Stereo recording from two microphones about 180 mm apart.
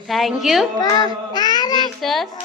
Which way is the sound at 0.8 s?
20° left (ahead or behind).